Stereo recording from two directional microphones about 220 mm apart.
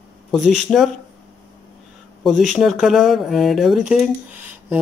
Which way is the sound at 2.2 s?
Centre (ahead or behind).